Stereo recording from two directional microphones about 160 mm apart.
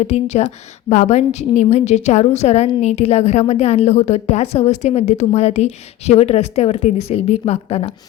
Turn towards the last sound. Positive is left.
turn(degrees=40)  # may be behind; listen again after turning